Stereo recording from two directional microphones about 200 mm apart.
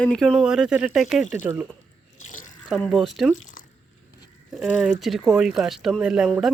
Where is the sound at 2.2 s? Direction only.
40° left (ahead or behind).